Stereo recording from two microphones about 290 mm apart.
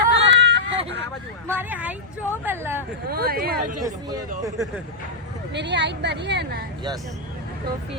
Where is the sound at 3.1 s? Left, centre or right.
Right.